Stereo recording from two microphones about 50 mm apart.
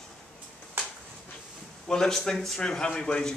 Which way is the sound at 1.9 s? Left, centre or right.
Centre.